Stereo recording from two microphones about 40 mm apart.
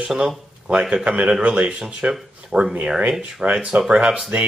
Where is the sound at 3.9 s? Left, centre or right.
Right.